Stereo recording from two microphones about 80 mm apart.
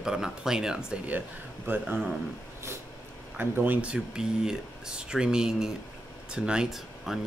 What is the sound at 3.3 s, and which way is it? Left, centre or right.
Speech, right.